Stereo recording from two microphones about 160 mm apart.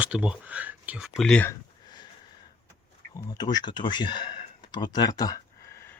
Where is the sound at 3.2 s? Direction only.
25° left (ahead or behind).